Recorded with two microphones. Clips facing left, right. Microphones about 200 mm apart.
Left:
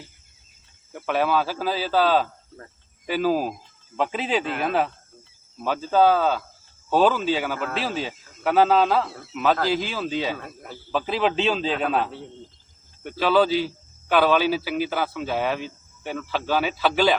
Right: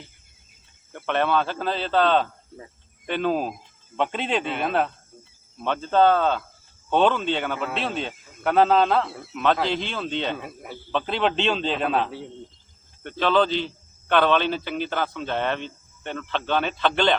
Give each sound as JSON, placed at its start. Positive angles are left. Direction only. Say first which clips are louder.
{"t": 0.9, "sound": "a man's voice", "louder": "even", "side_deg": 5}
{"t": 10.3, "sound": "speech", "louder": "right 2 dB", "side_deg": -10}
{"t": 10.9, "sound": "a man's voice", "louder": "left 1 dB", "side_deg": 5}